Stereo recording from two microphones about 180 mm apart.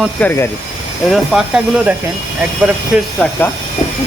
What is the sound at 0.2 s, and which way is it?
Speech, 10° left (ahead or behind).